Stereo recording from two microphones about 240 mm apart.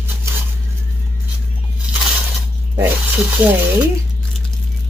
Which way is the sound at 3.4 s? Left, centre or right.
Centre.